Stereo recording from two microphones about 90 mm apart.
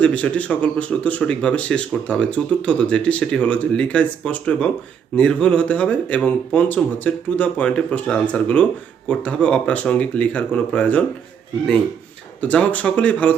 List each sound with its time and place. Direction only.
0.0 s speech: 15° left (ahead or behind)
12.4 s speech: 15° left (ahead or behind)